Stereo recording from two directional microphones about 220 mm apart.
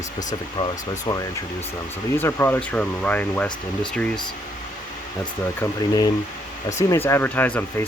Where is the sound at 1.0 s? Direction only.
15° left (ahead or behind).